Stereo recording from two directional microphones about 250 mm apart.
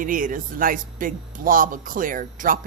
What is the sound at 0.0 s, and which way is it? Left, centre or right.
Speech, right.